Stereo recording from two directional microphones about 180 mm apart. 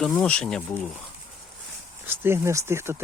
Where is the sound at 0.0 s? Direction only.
5° left (ahead or behind).